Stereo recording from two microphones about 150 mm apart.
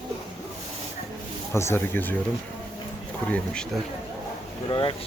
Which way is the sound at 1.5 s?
15° left (ahead or behind).